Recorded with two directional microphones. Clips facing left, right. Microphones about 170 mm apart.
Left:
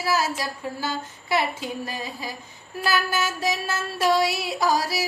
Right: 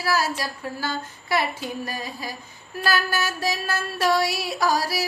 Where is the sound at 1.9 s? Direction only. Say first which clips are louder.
Even; 20° left (ahead or behind).